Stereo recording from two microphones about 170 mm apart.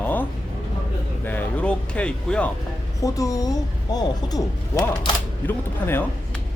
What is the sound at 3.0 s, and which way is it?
Speech, 20° left (ahead or behind).